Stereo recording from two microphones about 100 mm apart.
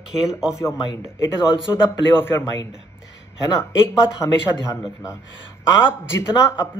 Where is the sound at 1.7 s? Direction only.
25° left (ahead or behind).